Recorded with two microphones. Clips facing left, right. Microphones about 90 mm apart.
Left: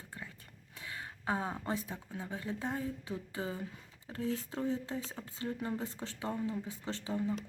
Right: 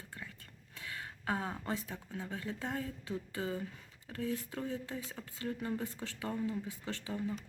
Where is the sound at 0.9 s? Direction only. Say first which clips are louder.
Left 1 dB; 20° left (ahead or behind).